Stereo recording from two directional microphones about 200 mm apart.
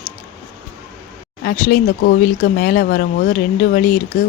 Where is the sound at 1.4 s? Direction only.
45° left (ahead or behind).